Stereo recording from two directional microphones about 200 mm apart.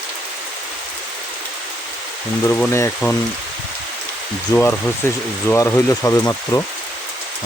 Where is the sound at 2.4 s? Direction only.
10° left (ahead or behind).